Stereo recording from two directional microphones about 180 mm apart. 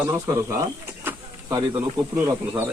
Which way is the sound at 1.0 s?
20° right (ahead or behind).